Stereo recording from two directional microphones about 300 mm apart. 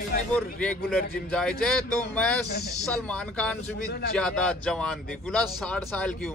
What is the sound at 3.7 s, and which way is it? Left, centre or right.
Speech, left.